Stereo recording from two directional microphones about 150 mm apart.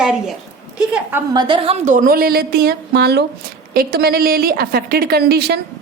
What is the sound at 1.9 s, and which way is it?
A woman's voice, 70° right (ahead or behind).